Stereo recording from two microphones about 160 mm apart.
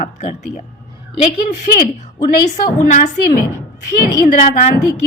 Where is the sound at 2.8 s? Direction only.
60° left (ahead or behind).